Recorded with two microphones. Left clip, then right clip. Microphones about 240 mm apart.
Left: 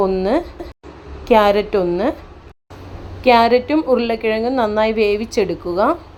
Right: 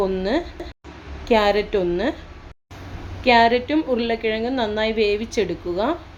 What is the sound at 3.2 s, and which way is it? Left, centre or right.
A woman's voice, centre.